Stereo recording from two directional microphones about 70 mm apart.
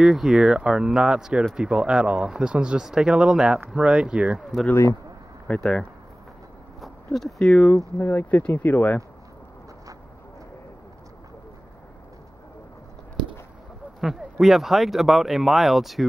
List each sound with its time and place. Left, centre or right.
0.0 s speech: centre
5.6 s speech: centre
8.0 s speech: left
14.0 s speech: centre